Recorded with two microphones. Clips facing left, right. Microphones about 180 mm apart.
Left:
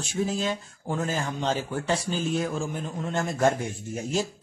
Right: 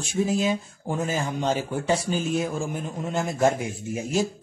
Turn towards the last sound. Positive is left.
turn(degrees=-10)  # may be behind; listen again after turning